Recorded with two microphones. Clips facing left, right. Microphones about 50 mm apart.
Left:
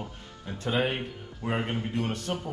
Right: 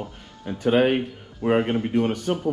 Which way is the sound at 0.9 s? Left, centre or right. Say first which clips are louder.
Right 9 dB; right.